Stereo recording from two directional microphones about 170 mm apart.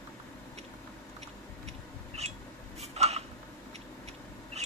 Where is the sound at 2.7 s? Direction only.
40° right (ahead or behind).